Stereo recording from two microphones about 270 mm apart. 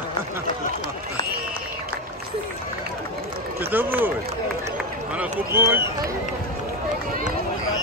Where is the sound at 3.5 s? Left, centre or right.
Centre.